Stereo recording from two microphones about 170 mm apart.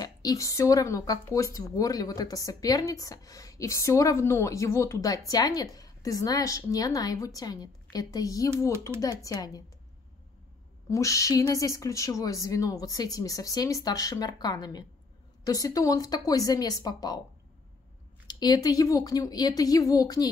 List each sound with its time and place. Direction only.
0.0 s speech: 20° left (ahead or behind)
10.9 s speech: 20° left (ahead or behind)
18.2 s speech: 25° left (ahead or behind)